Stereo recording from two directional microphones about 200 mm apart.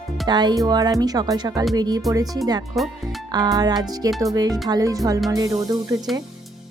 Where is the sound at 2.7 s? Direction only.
Centre (ahead or behind).